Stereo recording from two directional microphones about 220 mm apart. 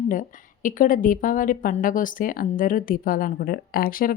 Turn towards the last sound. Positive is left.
turn(degrees=40)  # may be behind; listen again after turning